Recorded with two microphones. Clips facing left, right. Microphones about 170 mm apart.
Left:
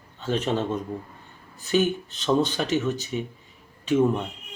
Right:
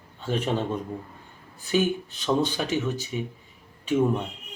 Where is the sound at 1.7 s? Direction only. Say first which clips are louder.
Left 1 dB; 10° right (ahead or behind).